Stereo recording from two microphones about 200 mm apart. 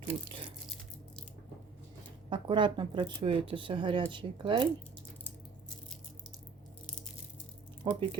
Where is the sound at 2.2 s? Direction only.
25° right (ahead or behind).